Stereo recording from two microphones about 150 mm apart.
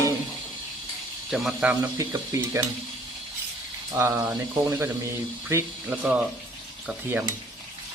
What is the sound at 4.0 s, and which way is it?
Cutlery, 15° right (ahead or behind).